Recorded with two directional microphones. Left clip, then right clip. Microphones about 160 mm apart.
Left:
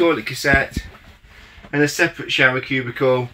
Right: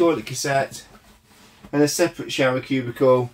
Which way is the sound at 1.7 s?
15° right (ahead or behind).